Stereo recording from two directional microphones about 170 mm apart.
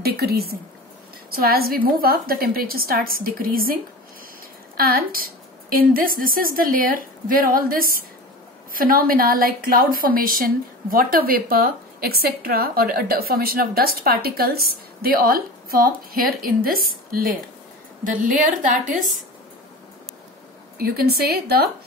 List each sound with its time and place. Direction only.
0.0 s a woman's voice: 65° right (ahead or behind)
4.7 s a woman's voice: 60° right (ahead or behind)
20.7 s a woman's voice: 60° right (ahead or behind)